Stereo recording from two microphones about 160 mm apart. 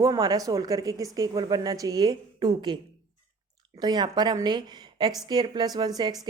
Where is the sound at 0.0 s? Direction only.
25° right (ahead or behind).